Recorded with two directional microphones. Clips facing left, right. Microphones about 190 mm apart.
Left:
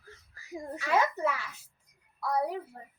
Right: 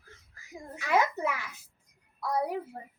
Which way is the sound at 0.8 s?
15° right (ahead or behind).